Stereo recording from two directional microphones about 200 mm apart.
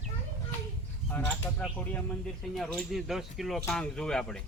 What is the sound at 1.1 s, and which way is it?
Speech, 10° left (ahead or behind).